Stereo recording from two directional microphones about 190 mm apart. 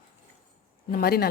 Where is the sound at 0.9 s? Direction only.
55° left (ahead or behind).